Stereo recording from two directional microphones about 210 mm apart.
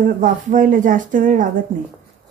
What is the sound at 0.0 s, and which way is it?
A woman's voice, 40° right (ahead or behind).